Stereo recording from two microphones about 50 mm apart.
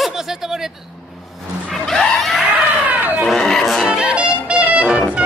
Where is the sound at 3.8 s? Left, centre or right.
Centre.